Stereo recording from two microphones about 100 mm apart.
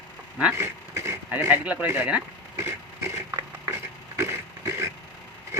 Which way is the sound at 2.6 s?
25° right (ahead or behind).